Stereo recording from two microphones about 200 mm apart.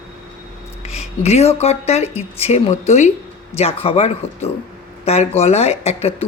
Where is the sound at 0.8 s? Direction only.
30° left (ahead or behind).